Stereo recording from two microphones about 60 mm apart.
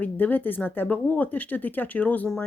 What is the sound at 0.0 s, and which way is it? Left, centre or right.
Speech, left.